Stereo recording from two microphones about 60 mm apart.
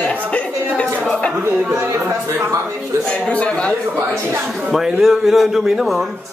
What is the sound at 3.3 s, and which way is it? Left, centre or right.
Speech, left.